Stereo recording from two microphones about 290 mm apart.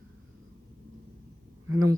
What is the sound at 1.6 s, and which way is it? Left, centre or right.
Speech, centre.